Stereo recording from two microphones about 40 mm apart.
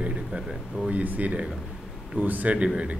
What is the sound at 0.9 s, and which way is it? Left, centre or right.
Speech, right.